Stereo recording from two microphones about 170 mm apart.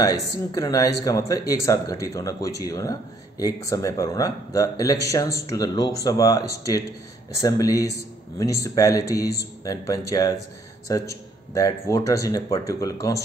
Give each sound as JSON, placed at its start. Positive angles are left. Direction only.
{"t": 0.5, "sound": "a man's voice", "side_deg": 20}